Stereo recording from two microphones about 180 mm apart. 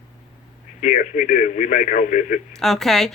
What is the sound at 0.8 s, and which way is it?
Speech, 45° left (ahead or behind).